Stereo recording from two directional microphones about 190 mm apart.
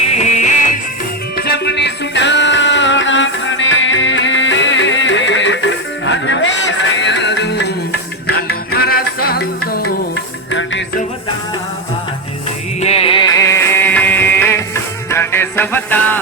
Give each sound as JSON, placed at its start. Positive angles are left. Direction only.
{"t": 0.1, "sound": "music", "side_deg": 35}
{"t": 1.4, "sound": "music", "side_deg": 60}
{"t": 10.5, "sound": "music", "side_deg": 75}
{"t": 12.8, "sound": "music", "side_deg": 30}
{"t": 13.3, "sound": "music", "side_deg": 15}